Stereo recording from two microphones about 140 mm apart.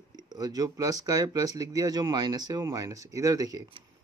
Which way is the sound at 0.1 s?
30° right (ahead or behind).